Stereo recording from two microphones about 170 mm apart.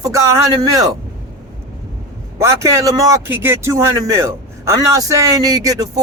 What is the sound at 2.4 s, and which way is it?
Speech, 15° right (ahead or behind).